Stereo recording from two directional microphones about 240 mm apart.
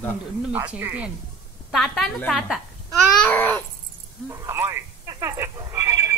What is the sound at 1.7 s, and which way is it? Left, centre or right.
Babbling, centre.